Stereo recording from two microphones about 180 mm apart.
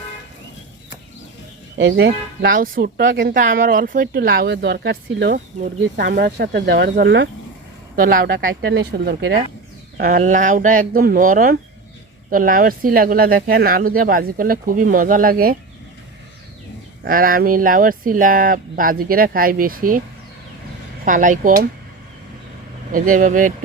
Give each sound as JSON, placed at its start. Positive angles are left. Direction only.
{"t": 1.8, "sound": "speech", "side_deg": -80}
{"t": 2.5, "sound": "speech", "side_deg": -50}
{"t": 7.9, "sound": "speech", "side_deg": -50}
{"t": 10.0, "sound": "speech", "side_deg": -45}
{"t": 17.0, "sound": "speech", "side_deg": -50}
{"t": 21.0, "sound": "speech", "side_deg": -45}
{"t": 22.9, "sound": "speech", "side_deg": -50}